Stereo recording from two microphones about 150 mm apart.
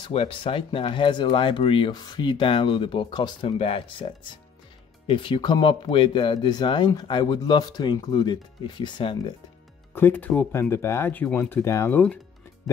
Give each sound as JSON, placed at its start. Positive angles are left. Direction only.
{"t": 0.0, "sound": "speech", "side_deg": 40}
{"t": 9.9, "sound": "speech", "side_deg": 15}